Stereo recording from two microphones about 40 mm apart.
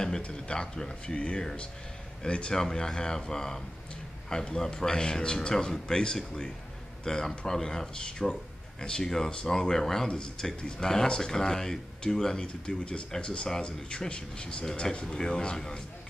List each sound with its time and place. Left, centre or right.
0.3 s a man's voice: left